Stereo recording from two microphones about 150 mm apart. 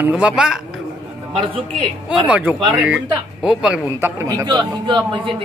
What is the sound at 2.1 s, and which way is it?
A man's voice, 10° right (ahead or behind).